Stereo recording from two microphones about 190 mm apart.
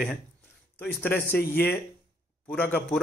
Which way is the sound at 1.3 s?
55° left (ahead or behind).